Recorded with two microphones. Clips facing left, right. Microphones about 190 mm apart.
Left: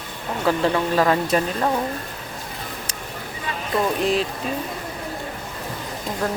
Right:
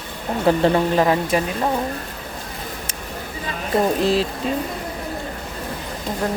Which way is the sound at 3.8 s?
30° right (ahead or behind).